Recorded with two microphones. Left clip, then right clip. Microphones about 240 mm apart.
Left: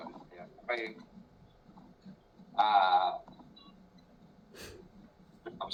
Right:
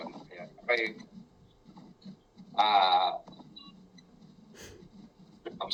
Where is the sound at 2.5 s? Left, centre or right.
Right.